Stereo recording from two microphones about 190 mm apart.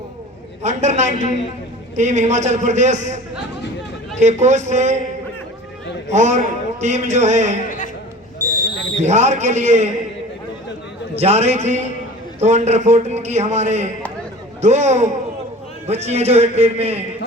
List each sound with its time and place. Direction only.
0.6 s a man's voice: 40° right (ahead or behind)
4.2 s a man's voice: 35° right (ahead or behind)
6.1 s a man's voice: 40° right (ahead or behind)
9.0 s a man's voice: 35° right (ahead or behind)
11.1 s a man's voice: 35° right (ahead or behind)